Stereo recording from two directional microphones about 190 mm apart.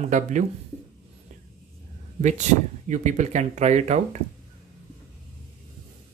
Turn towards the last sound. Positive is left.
turn(degrees=-35)  # may be behind; listen again after turning